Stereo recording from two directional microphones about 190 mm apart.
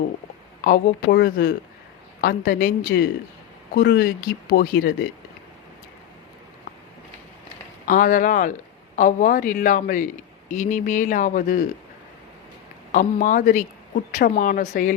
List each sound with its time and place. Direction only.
0.6 s a man's voice: 50° left (ahead or behind)
7.9 s a man's voice: 45° left (ahead or behind)
12.9 s a man's voice: 40° left (ahead or behind)